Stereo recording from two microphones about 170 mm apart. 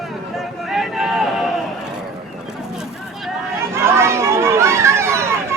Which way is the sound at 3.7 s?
15° right (ahead or behind).